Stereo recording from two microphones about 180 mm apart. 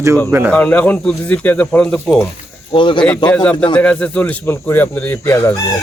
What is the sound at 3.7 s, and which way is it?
Speech, 5° left (ahead or behind).